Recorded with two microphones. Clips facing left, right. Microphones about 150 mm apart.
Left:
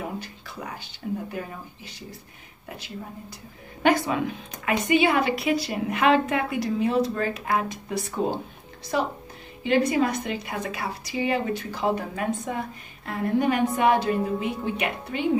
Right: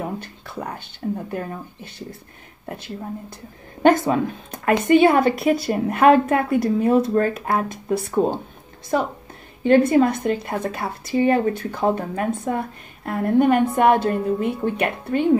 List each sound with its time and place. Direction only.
0.2 s a sound: 55° right (ahead or behind)
1.0 s a woman's voice: 45° right (ahead or behind)
3.8 s a woman's voice: 45° right (ahead or behind)
8.9 s a woman's voice: 40° right (ahead or behind)
9.6 s a woman's voice: 50° right (ahead or behind)